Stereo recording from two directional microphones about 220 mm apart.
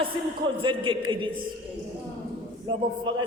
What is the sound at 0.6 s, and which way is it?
Speech, 20° right (ahead or behind).